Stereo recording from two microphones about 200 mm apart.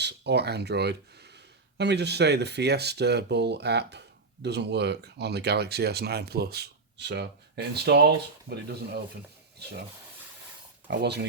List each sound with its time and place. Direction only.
0.0 s speech: 55° right (ahead or behind)
10.8 s speech: 60° right (ahead or behind)